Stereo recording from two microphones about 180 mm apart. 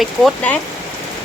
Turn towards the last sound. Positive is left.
turn(degrees=0)  # may be behind; listen again after turning